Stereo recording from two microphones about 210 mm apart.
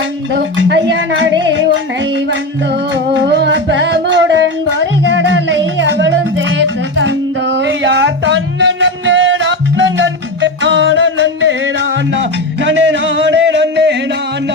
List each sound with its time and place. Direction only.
0.3 s music: 55° right (ahead or behind)